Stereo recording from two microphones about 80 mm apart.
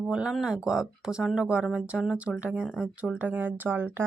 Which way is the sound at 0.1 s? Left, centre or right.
Centre.